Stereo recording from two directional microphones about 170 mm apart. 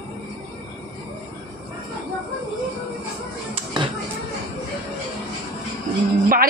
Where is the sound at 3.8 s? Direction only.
30° right (ahead or behind).